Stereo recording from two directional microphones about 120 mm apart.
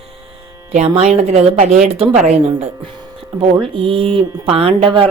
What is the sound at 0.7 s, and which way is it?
A woman's voice, 60° right (ahead or behind).